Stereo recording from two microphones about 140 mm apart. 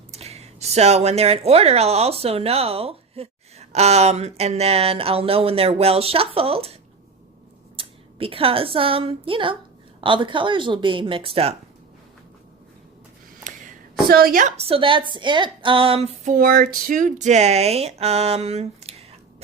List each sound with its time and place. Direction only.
0.1 s speech: 50° right (ahead or behind)
7.8 s a woman's voice: 40° right (ahead or behind)
13.4 s a sound: 80° right
14.5 s a woman's voice: 45° right (ahead or behind)
16.3 s speech: 85° right; by 19.0 s 50° right (ahead or behind)